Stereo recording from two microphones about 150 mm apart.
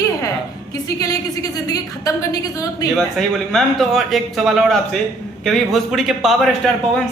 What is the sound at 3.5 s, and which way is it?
Speech, centre (ahead or behind).